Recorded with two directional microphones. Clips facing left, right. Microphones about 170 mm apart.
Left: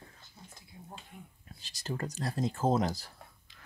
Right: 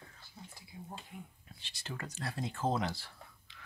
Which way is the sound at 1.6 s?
40° left (ahead or behind).